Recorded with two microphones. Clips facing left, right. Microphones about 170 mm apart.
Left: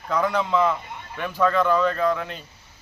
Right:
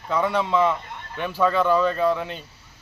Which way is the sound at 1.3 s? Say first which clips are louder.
Even; 5° right (ahead or behind).